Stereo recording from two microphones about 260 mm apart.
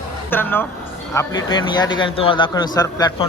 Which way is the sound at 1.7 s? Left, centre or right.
Centre.